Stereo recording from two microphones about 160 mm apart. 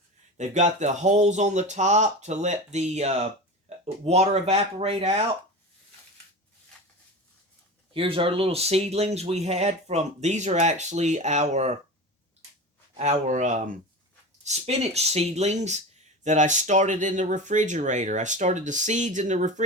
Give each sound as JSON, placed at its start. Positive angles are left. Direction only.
{"t": 0.3, "sound": "speech", "side_deg": -50}
{"t": 7.9, "sound": "speech", "side_deg": -35}
{"t": 13.0, "sound": "speech", "side_deg": -45}